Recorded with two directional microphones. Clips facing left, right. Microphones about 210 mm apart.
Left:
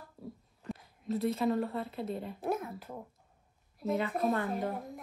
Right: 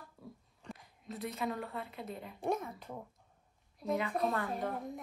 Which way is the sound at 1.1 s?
30° left (ahead or behind).